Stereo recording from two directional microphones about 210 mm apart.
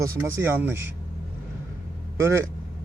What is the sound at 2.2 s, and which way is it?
Speech, 10° right (ahead or behind).